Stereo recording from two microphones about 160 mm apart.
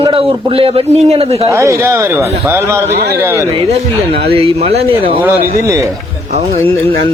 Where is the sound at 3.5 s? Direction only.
35° right (ahead or behind).